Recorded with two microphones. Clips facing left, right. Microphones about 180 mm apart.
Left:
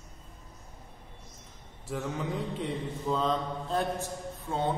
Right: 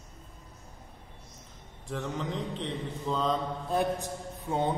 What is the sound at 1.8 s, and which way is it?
Mantra, 5° left (ahead or behind).